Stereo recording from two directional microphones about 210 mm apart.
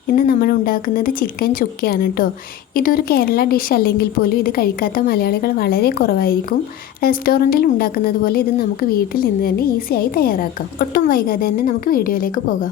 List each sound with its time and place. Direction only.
0.1 s a woman's voice: 45° left (ahead or behind)